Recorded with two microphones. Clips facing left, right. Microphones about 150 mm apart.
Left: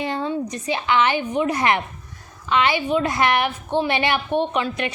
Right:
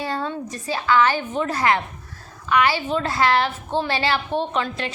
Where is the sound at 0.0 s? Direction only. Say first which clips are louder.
Left 2 dB; 20° left (ahead or behind).